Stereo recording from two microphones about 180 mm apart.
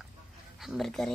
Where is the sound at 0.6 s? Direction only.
Centre (ahead or behind).